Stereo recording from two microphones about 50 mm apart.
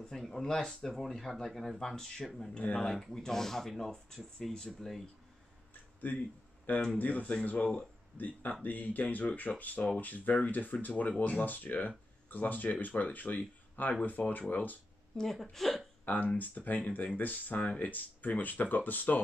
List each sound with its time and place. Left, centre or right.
0.0 s speech: centre
6.0 s speech: left
15.1 s a woman's voice: centre
16.1 s speech: left